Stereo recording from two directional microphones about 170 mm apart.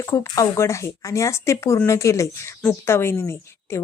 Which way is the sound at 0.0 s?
15° left (ahead or behind).